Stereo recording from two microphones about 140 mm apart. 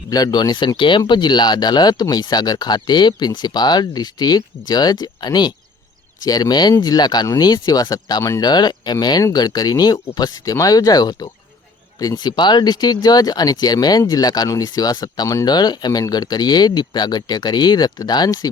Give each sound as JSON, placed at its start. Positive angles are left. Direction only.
{"t": 0.1, "sound": "speech", "side_deg": 30}